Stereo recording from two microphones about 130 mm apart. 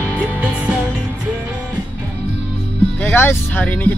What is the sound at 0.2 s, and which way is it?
Music, 10° right (ahead or behind).